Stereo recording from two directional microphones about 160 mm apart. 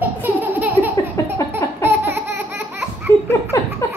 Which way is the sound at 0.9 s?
20° left (ahead or behind).